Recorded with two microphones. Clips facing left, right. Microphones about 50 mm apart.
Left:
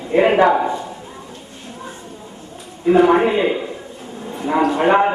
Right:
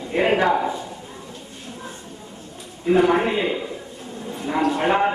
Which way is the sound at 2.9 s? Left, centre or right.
Centre.